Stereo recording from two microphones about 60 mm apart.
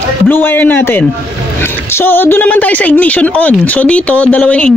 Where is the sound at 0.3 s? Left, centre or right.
Left.